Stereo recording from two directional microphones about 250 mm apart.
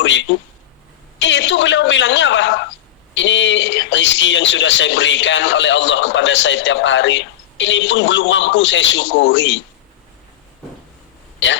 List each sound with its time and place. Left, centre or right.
0.0 s speech: left